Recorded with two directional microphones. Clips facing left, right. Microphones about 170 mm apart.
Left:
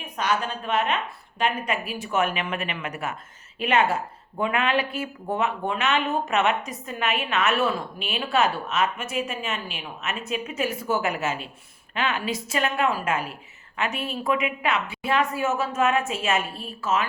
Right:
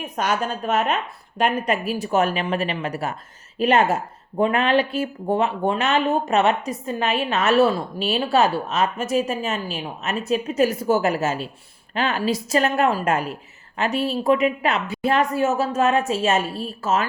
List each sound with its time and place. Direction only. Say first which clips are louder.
0.0 s a woman's voice: right 3 dB; 45° right (ahead or behind)